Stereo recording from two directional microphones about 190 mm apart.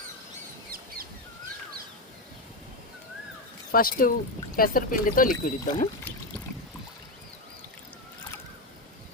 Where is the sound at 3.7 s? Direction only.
50° left (ahead or behind).